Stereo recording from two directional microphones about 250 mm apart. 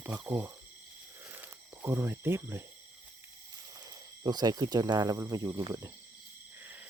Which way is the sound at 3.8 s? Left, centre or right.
Centre.